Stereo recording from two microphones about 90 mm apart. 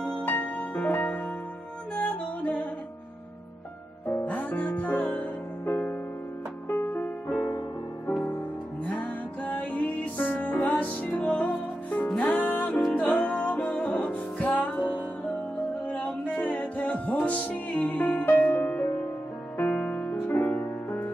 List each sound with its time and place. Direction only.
0.0 s music: 15° left (ahead or behind)
4.2 s music: 20° left (ahead or behind)
8.8 s music: 15° left (ahead or behind)